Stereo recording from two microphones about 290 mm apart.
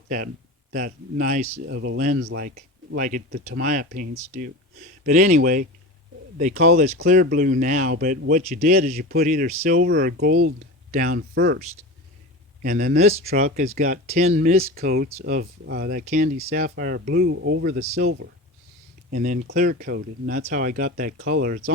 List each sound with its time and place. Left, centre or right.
0.7 s speech: right
1.6 s speech: right
2.0 s speech: right
12.6 s speech: right
19.1 s speech: right